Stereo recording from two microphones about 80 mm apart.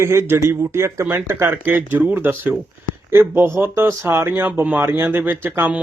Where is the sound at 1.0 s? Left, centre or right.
Right.